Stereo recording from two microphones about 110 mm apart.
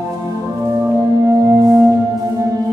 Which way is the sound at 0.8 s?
30° right (ahead or behind).